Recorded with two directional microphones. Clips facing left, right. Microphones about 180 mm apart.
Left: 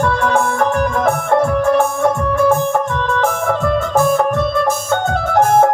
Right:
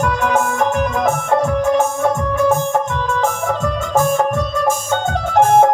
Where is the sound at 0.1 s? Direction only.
20° right (ahead or behind).